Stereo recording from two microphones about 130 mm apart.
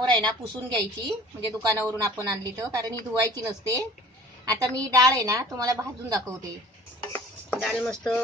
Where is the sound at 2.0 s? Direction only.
30° right (ahead or behind).